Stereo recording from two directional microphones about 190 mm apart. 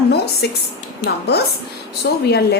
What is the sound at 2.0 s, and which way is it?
Speech, 60° left (ahead or behind).